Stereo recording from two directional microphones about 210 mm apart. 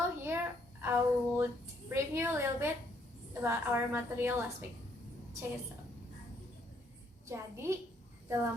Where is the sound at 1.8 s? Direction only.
10° right (ahead or behind).